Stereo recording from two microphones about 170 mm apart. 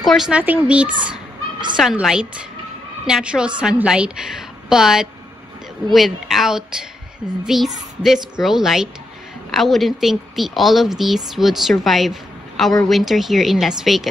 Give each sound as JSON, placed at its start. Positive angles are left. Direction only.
{"t": 0.0, "sound": "a woman's voice", "side_deg": 0}